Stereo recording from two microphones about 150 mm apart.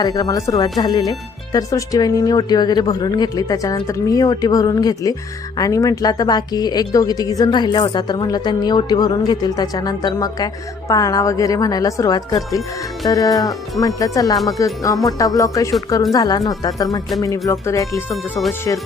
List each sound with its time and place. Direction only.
0.0 s speech: 25° left (ahead or behind)
18.1 s speech: centre (ahead or behind)